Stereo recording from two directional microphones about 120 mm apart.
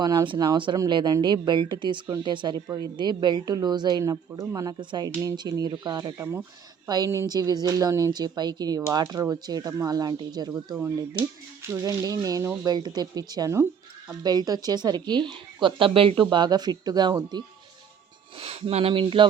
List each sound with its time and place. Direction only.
0.0 s a woman's voice: 35° right (ahead or behind)
10.8 s speech: 20° right (ahead or behind)
11.7 s a woman's voice: 30° right (ahead or behind)
18.3 s speech: 55° right (ahead or behind)